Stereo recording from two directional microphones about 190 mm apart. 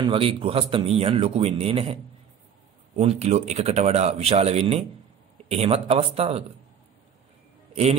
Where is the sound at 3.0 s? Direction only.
35° right (ahead or behind).